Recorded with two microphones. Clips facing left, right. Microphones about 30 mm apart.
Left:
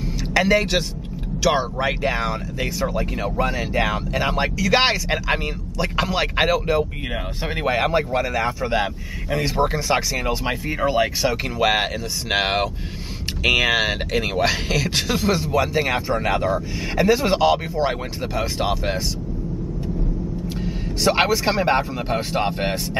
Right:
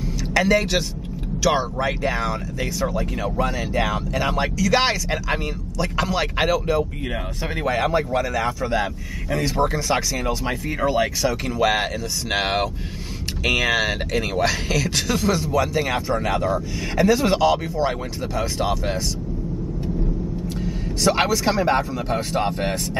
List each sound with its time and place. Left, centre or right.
0.3 s speech: centre
20.4 s a man's voice: centre